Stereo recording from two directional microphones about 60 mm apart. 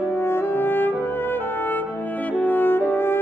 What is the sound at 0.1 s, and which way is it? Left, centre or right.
Brass instrument, left.